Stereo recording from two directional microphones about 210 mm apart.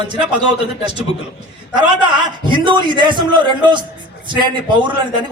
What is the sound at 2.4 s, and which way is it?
A man's voice, 20° right (ahead or behind).